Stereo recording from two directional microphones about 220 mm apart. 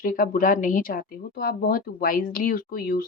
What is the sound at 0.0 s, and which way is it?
Speech, 40° left (ahead or behind).